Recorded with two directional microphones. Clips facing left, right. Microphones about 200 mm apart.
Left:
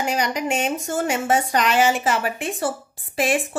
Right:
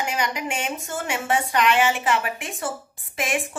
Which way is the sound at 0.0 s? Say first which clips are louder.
Left 4 dB; 35° left (ahead or behind).